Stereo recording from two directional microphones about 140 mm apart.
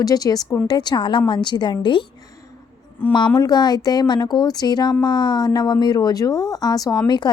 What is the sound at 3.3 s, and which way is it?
A woman's voice, 30° left (ahead or behind).